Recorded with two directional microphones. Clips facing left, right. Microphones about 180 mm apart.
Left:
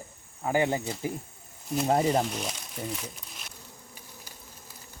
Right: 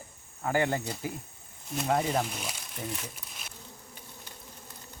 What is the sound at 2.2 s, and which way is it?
Speech, centre (ahead or behind).